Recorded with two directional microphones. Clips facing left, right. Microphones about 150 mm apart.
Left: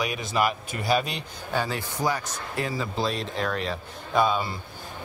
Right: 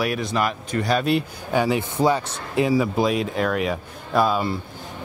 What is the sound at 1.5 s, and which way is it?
Speech, 15° right (ahead or behind).